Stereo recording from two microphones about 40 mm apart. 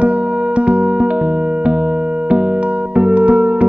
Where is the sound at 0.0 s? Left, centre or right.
Right.